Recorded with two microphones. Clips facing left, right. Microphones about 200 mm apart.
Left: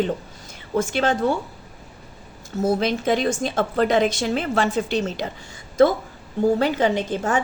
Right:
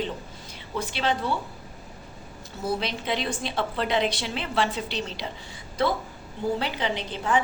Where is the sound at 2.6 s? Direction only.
45° left (ahead or behind).